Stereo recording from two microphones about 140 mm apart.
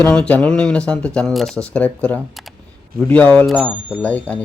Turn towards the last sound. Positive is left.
turn(degrees=10)  # may be behind; listen again after turning